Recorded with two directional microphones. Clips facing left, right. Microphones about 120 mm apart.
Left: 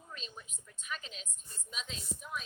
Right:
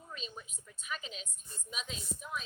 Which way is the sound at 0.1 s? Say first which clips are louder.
Right 3 dB; 5° right (ahead or behind).